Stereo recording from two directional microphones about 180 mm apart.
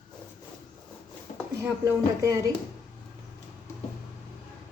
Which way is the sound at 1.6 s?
15° right (ahead or behind).